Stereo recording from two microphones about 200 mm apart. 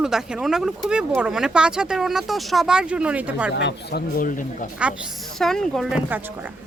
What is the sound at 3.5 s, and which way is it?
Speech, 60° left (ahead or behind).